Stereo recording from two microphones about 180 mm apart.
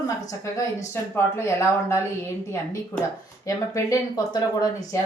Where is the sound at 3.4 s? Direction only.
20° left (ahead or behind).